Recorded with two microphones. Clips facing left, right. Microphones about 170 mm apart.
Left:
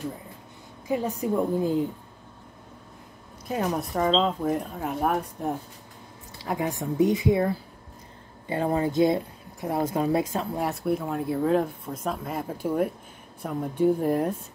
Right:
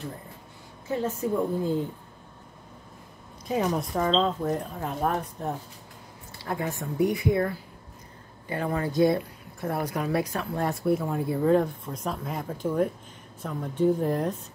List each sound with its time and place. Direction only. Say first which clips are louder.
0.8 s speech: left 1 dB; 15° left (ahead or behind)
3.4 s speech: right 1 dB; centre (ahead or behind); by 10.6 s 25° left (ahead or behind)
10.6 s speech: right 3 dB; centre (ahead or behind)